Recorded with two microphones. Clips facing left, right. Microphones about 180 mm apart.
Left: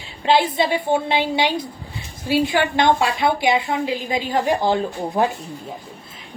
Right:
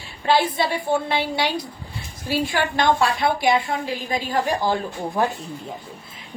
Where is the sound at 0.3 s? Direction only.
20° left (ahead or behind).